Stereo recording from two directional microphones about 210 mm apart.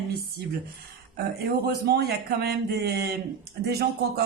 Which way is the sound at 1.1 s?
50° right (ahead or behind).